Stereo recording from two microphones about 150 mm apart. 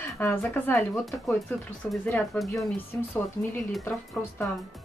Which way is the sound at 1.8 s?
10° left (ahead or behind).